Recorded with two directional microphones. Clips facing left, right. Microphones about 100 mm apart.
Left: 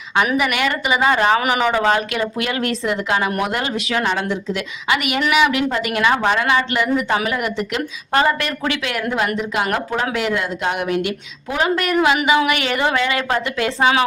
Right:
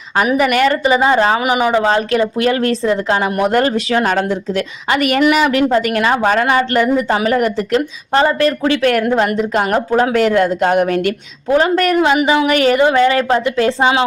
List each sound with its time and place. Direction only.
0.2 s speech: 40° right (ahead or behind)
1.4 s speech: 15° right (ahead or behind)
1.9 s speech: 35° right (ahead or behind)
3.5 s speech: 40° right (ahead or behind)
8.8 s speech: 45° right (ahead or behind)
9.0 s speech: 35° right (ahead or behind)
12.7 s a woman's voice: 25° right (ahead or behind)
13.0 s a woman's voice: 35° right (ahead or behind)